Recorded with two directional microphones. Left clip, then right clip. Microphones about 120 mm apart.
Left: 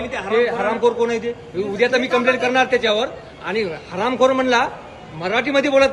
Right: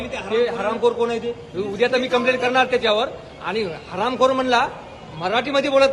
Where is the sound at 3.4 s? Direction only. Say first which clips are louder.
Left 2 dB; 25° left (ahead or behind).